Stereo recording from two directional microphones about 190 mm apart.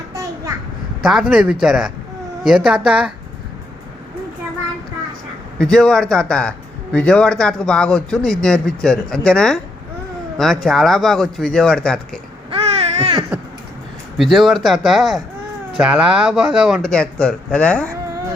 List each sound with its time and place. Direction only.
1.0 s speech: 5° right (ahead or behind)
5.5 s speech: 5° left (ahead or behind)
12.5 s a sound: 30° right (ahead or behind)
14.2 s speech: centre (ahead or behind)